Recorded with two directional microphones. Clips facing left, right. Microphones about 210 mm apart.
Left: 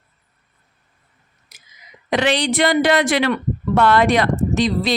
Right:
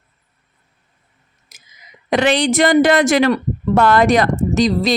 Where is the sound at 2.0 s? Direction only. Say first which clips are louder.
Right 3 dB; 50° right (ahead or behind).